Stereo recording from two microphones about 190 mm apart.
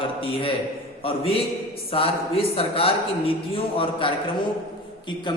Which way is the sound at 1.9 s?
30° left (ahead or behind).